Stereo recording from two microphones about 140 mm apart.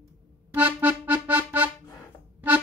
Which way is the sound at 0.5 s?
10° right (ahead or behind).